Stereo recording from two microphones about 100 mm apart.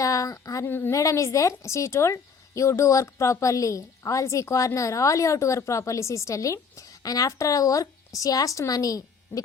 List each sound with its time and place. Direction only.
0.0 s a woman's voice: 35° left (ahead or behind)